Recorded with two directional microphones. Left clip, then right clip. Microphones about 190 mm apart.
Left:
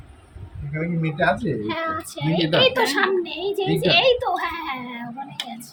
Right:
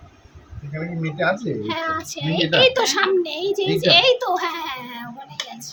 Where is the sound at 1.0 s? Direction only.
10° right (ahead or behind).